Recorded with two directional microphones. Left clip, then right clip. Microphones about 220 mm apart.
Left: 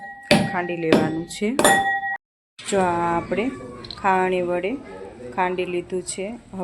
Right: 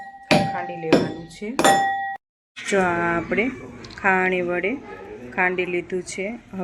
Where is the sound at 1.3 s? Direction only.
50° left (ahead or behind).